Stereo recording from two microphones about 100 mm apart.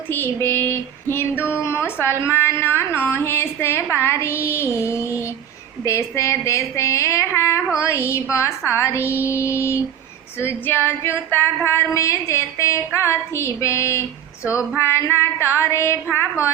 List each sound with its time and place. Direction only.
0.1 s female singing: 20° left (ahead or behind)